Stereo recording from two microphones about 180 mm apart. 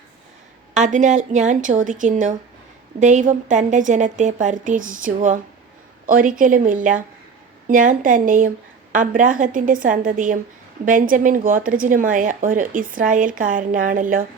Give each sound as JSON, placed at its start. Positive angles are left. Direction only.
{"t": 0.7, "sound": "a woman's voice", "side_deg": -45}